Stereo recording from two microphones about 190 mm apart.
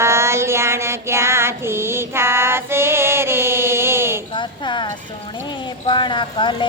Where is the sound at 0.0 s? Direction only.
15° right (ahead or behind).